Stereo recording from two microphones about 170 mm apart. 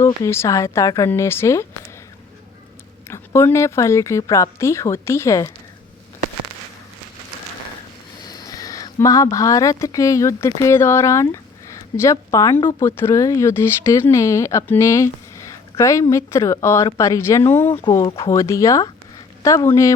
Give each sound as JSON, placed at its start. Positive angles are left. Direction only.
{"t": 0.0, "sound": "speech", "side_deg": 15}
{"t": 3.1, "sound": "speech", "side_deg": 15}
{"t": 8.2, "sound": "speech", "side_deg": 25}